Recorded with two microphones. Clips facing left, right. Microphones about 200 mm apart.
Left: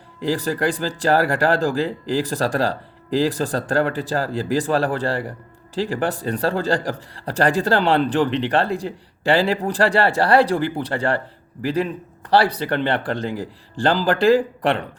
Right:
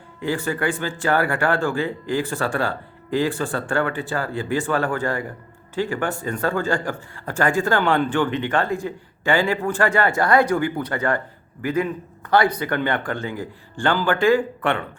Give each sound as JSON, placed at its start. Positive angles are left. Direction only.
{"t": 0.2, "sound": "speech", "side_deg": 35}
{"t": 12.3, "sound": "speech", "side_deg": 30}